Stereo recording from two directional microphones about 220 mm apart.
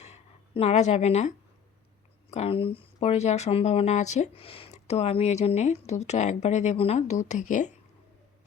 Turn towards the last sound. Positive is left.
turn(degrees=35)  # may be behind; listen again after turning